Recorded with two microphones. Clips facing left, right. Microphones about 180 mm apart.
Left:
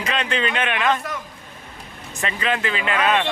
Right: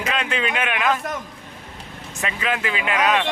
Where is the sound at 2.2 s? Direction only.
5° right (ahead or behind).